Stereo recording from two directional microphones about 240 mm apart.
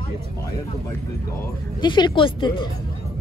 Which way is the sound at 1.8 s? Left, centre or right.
Centre.